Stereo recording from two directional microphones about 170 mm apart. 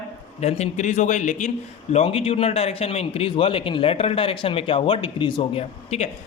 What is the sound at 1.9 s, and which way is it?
A man's voice, 35° left (ahead or behind).